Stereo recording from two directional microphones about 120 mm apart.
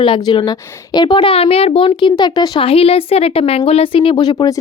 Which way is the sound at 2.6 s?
50° left (ahead or behind).